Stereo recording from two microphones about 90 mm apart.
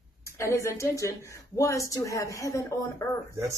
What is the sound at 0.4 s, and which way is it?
A woman's voice, 35° left (ahead or behind).